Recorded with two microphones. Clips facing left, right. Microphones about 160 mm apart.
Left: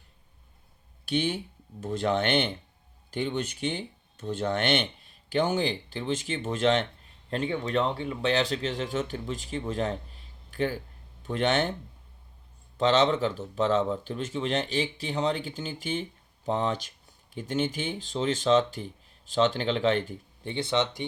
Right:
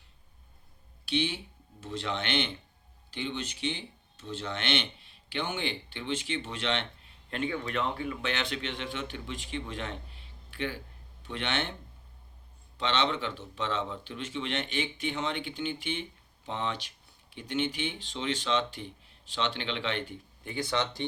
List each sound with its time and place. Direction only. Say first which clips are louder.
1.0 s speech: left 3 dB; 50° left (ahead or behind)
12.7 s speech: left 7 dB; 40° left (ahead or behind); by 21.1 s 20° left (ahead or behind)